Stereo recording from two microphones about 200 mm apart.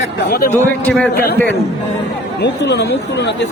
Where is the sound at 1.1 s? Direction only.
50° left (ahead or behind).